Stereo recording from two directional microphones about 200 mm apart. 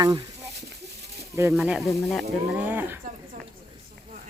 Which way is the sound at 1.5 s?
5° right (ahead or behind).